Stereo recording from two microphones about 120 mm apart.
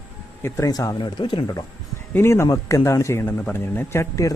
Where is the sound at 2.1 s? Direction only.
20° left (ahead or behind).